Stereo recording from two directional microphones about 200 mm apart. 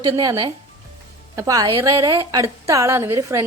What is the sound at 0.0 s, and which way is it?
A woman's voice, 20° right (ahead or behind).